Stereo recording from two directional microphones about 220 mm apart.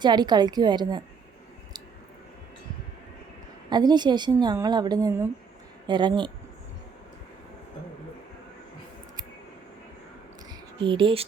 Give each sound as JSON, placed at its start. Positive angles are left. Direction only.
{"t": 0.0, "sound": "a woman's voice", "side_deg": -20}
{"t": 3.7, "sound": "a woman's voice", "side_deg": -20}
{"t": 10.8, "sound": "a woman's voice", "side_deg": -20}